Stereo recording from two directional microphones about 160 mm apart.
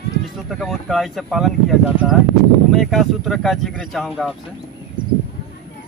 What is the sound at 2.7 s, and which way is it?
Speech, centre (ahead or behind).